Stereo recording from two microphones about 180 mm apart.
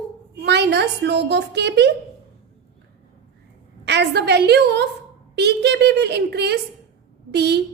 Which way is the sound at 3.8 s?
70° right (ahead or behind).